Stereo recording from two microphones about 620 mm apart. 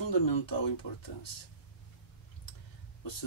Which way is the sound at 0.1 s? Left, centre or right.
Left.